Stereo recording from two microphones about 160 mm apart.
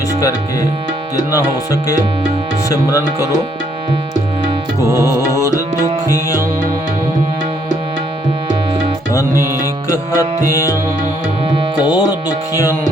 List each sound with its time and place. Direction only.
1.1 s speech: 20° left (ahead or behind)
4.9 s music: 20° left (ahead or behind)
9.9 s speech: 20° left (ahead or behind)
11.9 s speech: 25° left (ahead or behind)